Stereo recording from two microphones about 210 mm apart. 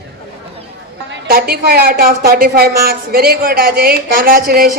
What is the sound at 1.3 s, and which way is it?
A woman's voice, 45° right (ahead or behind).